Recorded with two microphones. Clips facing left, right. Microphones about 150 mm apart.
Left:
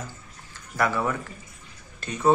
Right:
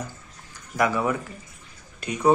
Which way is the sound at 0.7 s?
15° right (ahead or behind).